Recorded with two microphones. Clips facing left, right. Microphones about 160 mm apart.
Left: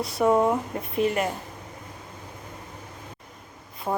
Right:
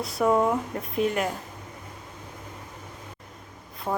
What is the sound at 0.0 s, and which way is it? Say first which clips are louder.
A woman's voice: left 1 dB; centre (ahead or behind).